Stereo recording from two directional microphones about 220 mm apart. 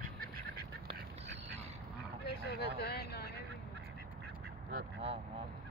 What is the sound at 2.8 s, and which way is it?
Speech, 45° left (ahead or behind).